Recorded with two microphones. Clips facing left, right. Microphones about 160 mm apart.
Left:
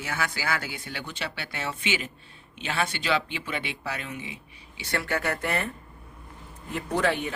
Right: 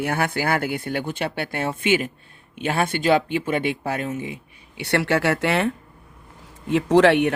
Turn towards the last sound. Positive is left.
turn(degrees=-75)  # may be behind; listen again after turning